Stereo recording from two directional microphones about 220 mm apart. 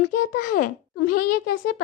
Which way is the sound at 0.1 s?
40° left (ahead or behind).